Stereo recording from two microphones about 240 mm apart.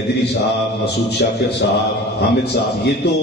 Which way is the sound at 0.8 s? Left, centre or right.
Left.